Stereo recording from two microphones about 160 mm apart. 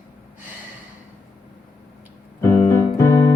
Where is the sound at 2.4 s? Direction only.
15° left (ahead or behind).